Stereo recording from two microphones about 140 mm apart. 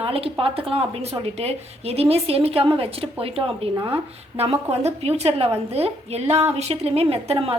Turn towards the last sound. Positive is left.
turn(degrees=-45)  # may be behind; listen again after turning